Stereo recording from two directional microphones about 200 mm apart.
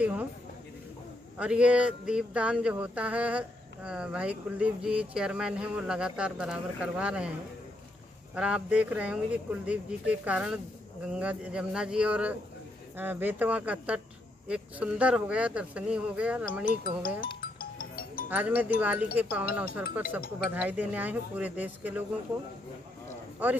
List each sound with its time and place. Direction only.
0.0 s a sound: 5° right (ahead or behind)
1.4 s speech: 5° right (ahead or behind)
8.4 s speech: 5° right (ahead or behind)
17.4 s music: 45° left (ahead or behind)
18.3 s speech: 10° right (ahead or behind)